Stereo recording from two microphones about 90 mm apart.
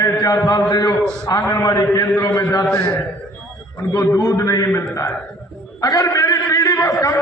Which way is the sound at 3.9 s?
30° left (ahead or behind).